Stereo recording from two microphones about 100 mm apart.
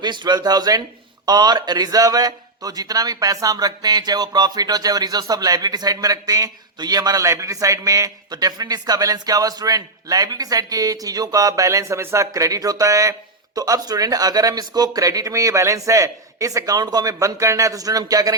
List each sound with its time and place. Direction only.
0.0 s speech: 50° right (ahead or behind)